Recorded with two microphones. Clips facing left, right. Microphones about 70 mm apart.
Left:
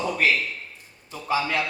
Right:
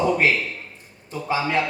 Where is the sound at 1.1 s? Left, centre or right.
Right.